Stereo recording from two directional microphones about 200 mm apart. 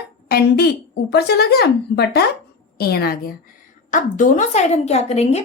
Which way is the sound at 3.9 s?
40° left (ahead or behind).